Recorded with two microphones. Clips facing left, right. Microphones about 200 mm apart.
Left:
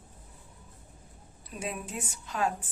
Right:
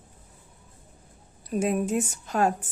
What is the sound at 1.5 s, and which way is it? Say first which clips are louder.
Speech: right 12 dB; 45° right (ahead or behind).